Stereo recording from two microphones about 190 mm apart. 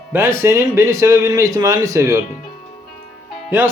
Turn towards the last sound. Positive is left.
turn(degrees=-10)  # may be behind; listen again after turning